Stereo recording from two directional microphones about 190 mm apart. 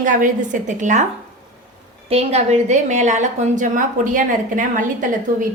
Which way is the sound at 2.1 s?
35° right (ahead or behind).